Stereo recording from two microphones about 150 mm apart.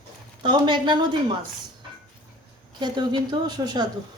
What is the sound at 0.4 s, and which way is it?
Speech, 30° right (ahead or behind).